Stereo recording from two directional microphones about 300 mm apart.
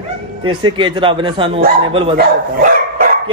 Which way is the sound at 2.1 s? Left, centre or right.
Right.